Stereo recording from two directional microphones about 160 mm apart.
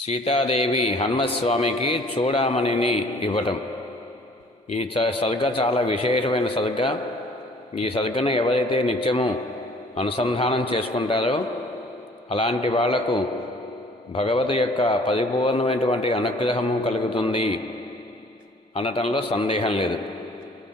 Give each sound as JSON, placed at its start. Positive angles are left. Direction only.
{"t": 0.0, "sound": "a man's voice", "side_deg": 40}
{"t": 4.7, "sound": "a man's voice", "side_deg": 35}
{"t": 18.7, "sound": "a man's voice", "side_deg": 35}